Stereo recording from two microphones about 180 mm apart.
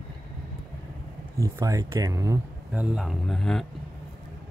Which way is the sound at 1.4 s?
15° right (ahead or behind).